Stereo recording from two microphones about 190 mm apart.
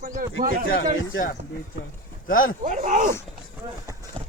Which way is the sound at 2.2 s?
45° left (ahead or behind).